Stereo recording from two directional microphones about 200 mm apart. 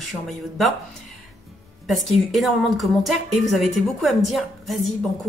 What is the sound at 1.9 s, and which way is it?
A woman's voice, centre (ahead or behind).